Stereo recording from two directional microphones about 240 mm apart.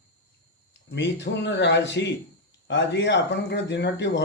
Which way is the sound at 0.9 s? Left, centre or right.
Left.